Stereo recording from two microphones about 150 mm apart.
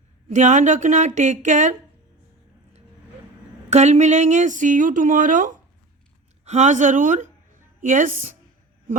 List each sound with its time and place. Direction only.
0.3 s speech: 55° right (ahead or behind)
3.7 s speech: 50° right (ahead or behind)